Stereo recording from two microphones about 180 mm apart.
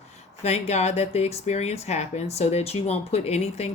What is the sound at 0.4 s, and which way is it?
Speech, 35° left (ahead or behind).